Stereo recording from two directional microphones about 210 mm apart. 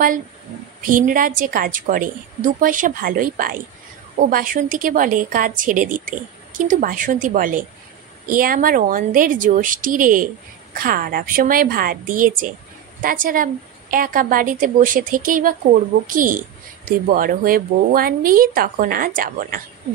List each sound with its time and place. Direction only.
0.8 s a woman's voice: 40° right (ahead or behind)